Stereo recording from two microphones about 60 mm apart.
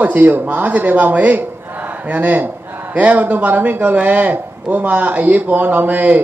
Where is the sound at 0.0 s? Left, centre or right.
Right.